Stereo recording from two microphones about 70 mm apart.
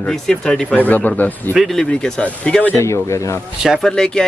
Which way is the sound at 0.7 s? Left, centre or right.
Left.